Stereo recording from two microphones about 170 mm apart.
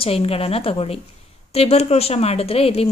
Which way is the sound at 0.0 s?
35° left (ahead or behind).